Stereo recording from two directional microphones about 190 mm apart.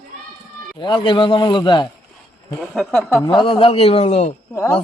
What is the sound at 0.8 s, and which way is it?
Speech, 25° left (ahead or behind).